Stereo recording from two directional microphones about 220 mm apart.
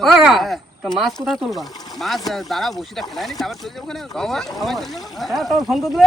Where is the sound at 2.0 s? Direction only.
Centre (ahead or behind).